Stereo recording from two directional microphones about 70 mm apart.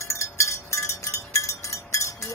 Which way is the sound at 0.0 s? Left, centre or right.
Left.